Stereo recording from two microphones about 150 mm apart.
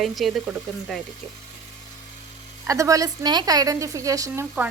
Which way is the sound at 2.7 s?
20° right (ahead or behind).